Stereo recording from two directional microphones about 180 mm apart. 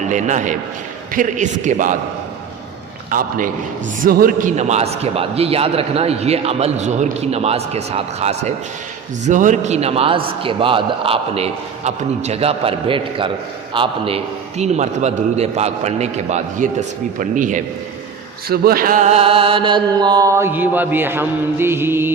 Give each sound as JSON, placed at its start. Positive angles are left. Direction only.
{"t": 0.1, "sound": "a man's voice", "side_deg": -45}
{"t": 3.1, "sound": "a man's voice", "side_deg": -50}
{"t": 18.4, "sound": "mantra", "side_deg": -55}